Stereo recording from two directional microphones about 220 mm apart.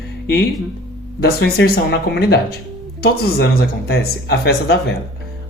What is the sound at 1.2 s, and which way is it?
Speech, 45° left (ahead or behind).